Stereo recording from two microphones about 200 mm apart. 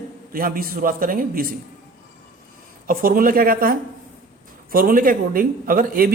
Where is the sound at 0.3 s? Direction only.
45° right (ahead or behind).